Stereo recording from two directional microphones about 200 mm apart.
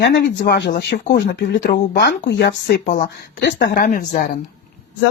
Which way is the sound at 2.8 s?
40° left (ahead or behind).